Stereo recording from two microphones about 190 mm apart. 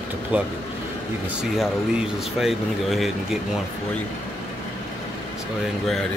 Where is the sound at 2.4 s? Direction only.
Centre (ahead or behind).